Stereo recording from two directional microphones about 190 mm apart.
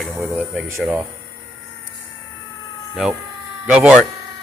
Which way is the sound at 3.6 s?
5° right (ahead or behind).